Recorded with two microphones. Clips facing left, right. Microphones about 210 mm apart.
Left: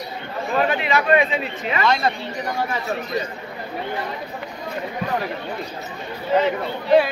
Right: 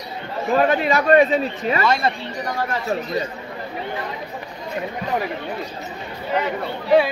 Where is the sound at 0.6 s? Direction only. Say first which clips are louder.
Right 2 dB; 40° right (ahead or behind).